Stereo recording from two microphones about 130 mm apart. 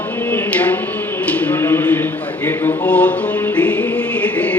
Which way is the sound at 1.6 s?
20° left (ahead or behind).